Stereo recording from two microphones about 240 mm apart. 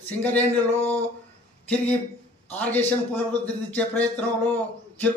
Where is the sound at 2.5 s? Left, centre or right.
Centre.